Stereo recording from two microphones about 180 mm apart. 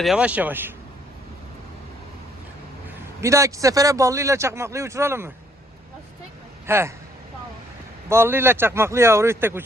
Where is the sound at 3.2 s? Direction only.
15° right (ahead or behind).